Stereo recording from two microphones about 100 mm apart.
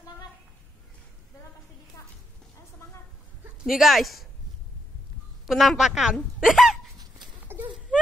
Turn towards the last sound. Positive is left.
turn(degrees=-20)  # may be behind; listen again after turning